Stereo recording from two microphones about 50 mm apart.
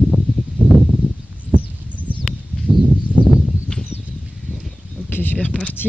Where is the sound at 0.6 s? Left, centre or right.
Left.